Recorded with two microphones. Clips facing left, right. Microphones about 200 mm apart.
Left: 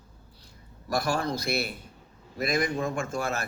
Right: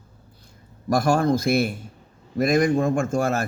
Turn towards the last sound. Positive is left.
turn(degrees=-45)  # may be behind; listen again after turning